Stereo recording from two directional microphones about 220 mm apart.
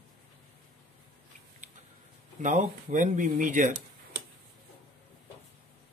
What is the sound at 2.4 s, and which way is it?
Speech, 35° right (ahead or behind).